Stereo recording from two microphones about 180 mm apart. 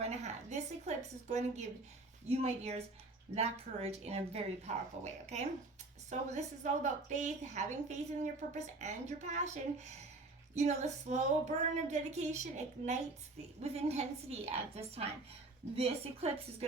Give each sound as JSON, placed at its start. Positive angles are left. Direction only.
{"t": 0.0, "sound": "a woman's voice", "side_deg": -40}